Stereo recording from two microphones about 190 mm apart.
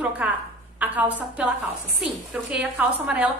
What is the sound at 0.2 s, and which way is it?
A woman's voice, 10° right (ahead or behind).